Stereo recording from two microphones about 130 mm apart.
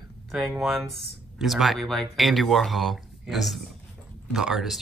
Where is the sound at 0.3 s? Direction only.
Centre (ahead or behind).